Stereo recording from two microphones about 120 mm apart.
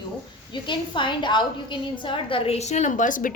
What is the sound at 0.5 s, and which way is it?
A woman's voice, 40° left (ahead or behind).